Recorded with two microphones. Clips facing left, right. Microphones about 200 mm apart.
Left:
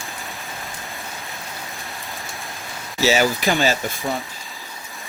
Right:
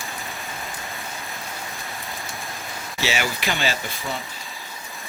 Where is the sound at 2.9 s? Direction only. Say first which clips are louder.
Left 8 dB; 40° left (ahead or behind).